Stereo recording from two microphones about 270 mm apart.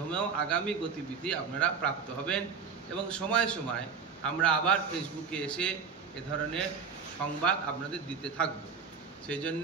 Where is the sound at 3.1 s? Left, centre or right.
Centre.